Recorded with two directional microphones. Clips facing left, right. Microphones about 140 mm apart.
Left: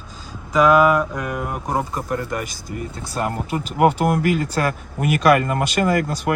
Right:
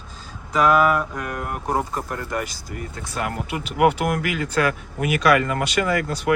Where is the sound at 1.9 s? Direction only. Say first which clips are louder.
Left 3 dB; 15° left (ahead or behind).